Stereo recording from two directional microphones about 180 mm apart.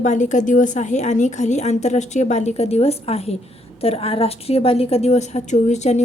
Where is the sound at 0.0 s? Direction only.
45° left (ahead or behind).